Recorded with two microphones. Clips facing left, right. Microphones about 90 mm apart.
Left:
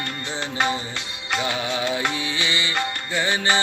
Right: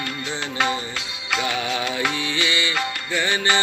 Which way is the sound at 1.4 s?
25° left (ahead or behind).